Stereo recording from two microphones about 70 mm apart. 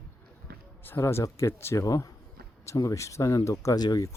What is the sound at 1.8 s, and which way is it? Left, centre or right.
Speech, left.